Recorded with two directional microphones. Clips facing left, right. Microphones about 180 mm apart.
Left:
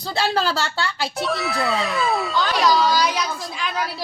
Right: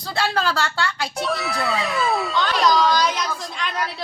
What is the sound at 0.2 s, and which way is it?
Speech, centre (ahead or behind).